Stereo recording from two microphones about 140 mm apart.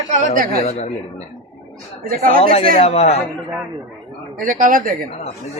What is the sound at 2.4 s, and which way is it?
Speech, 50° left (ahead or behind).